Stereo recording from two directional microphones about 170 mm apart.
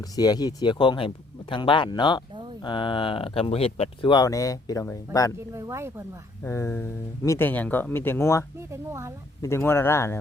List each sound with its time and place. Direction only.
0.0 s speech: 20° left (ahead or behind)
2.3 s a sound: 30° right (ahead or behind)
2.6 s speech: 30° left (ahead or behind)
5.5 s speech: 15° right (ahead or behind)
6.4 s speech: 15° left (ahead or behind)
8.5 s speech: 15° right (ahead or behind)
9.4 s speech: 15° left (ahead or behind)